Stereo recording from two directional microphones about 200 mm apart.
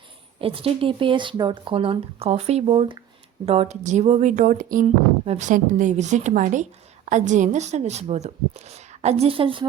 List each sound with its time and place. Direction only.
0.3 s a woman's voice: 30° right (ahead or behind)